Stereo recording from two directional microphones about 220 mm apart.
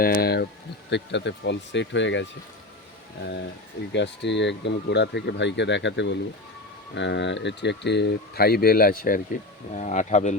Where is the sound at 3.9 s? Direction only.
55° left (ahead or behind).